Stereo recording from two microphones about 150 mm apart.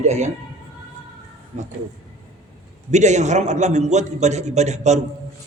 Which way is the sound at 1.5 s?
50° right (ahead or behind).